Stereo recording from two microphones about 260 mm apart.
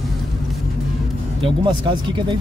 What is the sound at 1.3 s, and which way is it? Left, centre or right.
Speech, centre.